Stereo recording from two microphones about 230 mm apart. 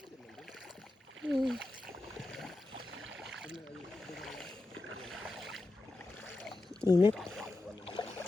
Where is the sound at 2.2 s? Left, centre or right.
Centre.